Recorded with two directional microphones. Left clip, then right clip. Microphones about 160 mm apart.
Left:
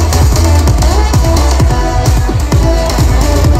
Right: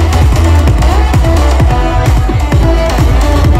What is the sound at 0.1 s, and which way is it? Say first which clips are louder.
Music: even; 25° left (ahead or behind).